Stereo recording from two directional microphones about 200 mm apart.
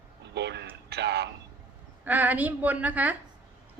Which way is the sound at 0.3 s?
60° right (ahead or behind).